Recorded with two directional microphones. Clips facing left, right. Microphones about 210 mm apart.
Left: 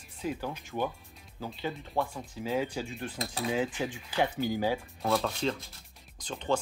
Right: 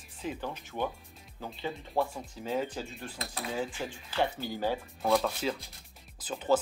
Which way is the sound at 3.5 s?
15° left (ahead or behind).